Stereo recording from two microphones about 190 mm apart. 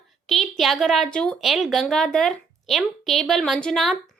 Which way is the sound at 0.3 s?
Centre (ahead or behind).